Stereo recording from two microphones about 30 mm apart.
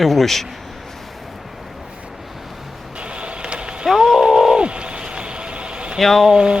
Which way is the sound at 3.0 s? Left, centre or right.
Right.